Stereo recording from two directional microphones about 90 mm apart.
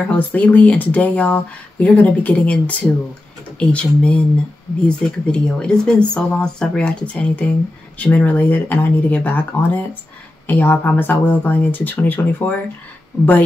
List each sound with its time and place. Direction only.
0.1 s speech: 20° left (ahead or behind)